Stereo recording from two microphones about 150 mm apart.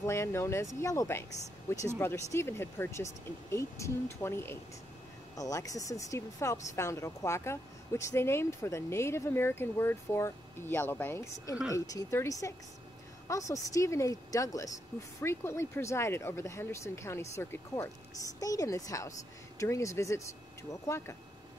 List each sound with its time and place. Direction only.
0.0 s speech: 20° left (ahead or behind)